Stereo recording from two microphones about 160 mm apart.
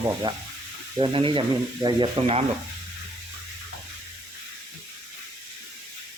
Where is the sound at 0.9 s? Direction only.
35° right (ahead or behind).